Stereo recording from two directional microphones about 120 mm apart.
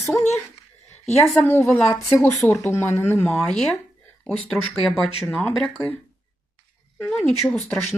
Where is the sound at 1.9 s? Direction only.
25° left (ahead or behind).